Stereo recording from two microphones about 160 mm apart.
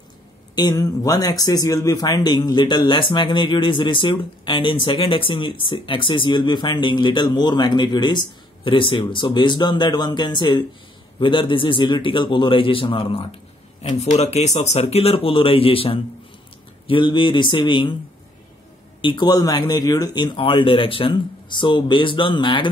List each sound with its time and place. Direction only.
0.6 s a man's voice: 25° left (ahead or behind)
18.9 s speech: 30° left (ahead or behind)